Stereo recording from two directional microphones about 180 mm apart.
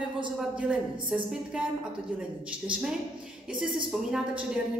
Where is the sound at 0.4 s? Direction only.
5° right (ahead or behind).